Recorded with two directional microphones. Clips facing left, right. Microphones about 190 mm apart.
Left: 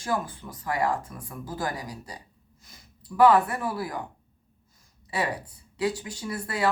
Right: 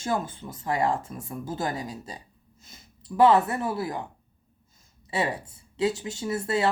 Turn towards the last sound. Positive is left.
turn(degrees=-25)  # may be behind; listen again after turning